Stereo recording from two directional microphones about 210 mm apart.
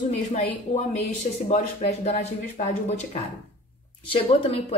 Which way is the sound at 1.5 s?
30° left (ahead or behind).